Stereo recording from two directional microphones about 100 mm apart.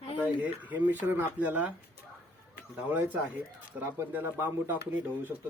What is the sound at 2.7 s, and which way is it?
Speech, 15° right (ahead or behind).